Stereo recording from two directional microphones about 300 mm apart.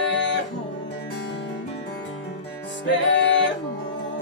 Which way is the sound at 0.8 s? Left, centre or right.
Left.